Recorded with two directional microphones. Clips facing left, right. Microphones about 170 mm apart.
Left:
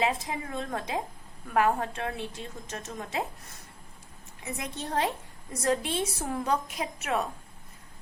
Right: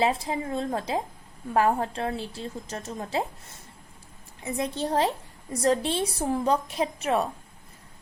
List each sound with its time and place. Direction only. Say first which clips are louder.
0.0 s a woman's voice: right 4 dB; 30° right (ahead or behind)